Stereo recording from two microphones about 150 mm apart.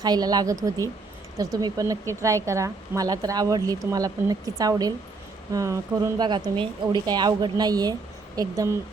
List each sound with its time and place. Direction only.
0.0 s speech: 25° right (ahead or behind)